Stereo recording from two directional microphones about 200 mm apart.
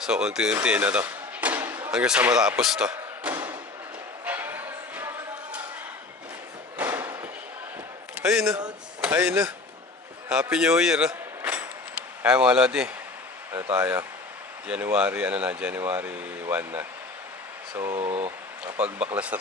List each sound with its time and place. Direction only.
0.0 s speech: 5° right (ahead or behind)
4.3 s music: 10° right (ahead or behind)
6.7 s a sound: 10° right (ahead or behind)
9.0 s speech: 10° right (ahead or behind)
18.0 s speech: 30° right (ahead or behind)
18.6 s speech: 5° right (ahead or behind)